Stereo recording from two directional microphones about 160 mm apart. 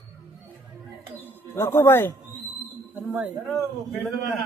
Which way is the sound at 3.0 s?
10° right (ahead or behind).